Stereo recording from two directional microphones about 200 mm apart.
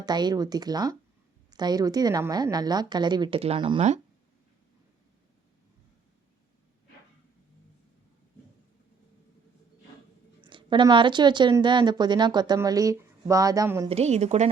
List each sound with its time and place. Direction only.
0.0 s a woman's voice: 20° right (ahead or behind)
10.4 s a woman's voice: 25° right (ahead or behind)
13.8 s a woman's voice: 30° right (ahead or behind)